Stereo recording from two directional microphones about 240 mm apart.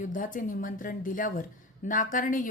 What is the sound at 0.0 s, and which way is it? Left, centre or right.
A woman's voice, left.